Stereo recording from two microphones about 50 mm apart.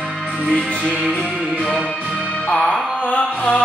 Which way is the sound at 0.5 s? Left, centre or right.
Centre.